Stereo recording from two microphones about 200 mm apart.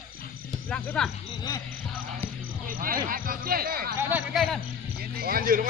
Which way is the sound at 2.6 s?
45° right (ahead or behind).